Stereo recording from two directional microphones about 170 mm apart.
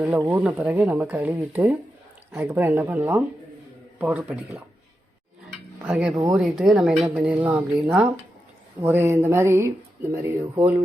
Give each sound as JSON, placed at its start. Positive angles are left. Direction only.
{"t": 0.0, "sound": "speech", "side_deg": -10}
{"t": 5.8, "sound": "a woman's voice", "side_deg": -5}